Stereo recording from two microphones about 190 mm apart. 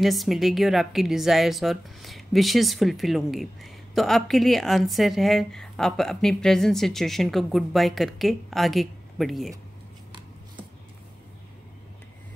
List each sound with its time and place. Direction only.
0.0 s a woman's voice: centre (ahead or behind)